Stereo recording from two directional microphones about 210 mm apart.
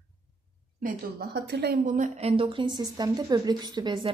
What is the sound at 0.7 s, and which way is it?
A woman's voice, 45° right (ahead or behind).